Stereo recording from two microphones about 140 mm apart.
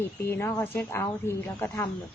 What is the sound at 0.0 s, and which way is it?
A woman's voice, 15° left (ahead or behind).